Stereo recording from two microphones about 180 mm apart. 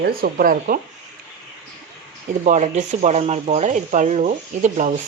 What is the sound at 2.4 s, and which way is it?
Speech, 40° right (ahead or behind).